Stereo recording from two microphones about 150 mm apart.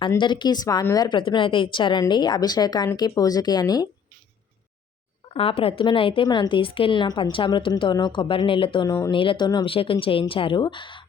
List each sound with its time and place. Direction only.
0.2 s a woman's voice: 30° left (ahead or behind)
5.3 s a woman's voice: 40° left (ahead or behind)